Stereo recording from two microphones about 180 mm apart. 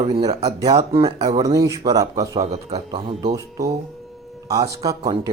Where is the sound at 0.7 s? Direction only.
35° right (ahead or behind).